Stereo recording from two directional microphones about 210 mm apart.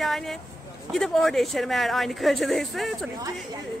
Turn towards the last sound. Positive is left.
turn(degrees=0)  # may be behind; listen again after turning